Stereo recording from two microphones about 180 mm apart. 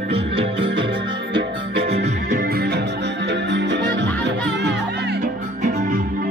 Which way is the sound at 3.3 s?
75° right (ahead or behind).